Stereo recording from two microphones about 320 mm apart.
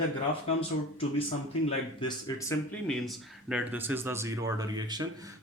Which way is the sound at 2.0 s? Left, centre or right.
Centre.